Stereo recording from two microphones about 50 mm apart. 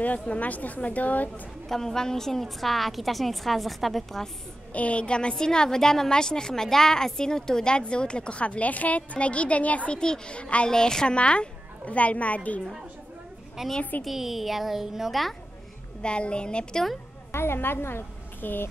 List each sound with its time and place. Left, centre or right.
0.0 s speech: left
1.7 s a woman's voice: centre
4.7 s a woman's voice: left
9.9 s a woman's voice: centre
13.6 s a woman's voice: centre
16.0 s a woman's voice: left
17.3 s a woman's voice: left